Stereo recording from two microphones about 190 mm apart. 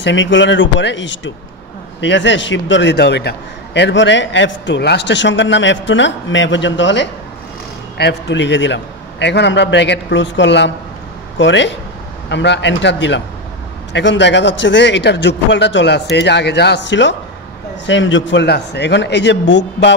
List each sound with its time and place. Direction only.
0.0 s a man's voice: 75° left (ahead or behind)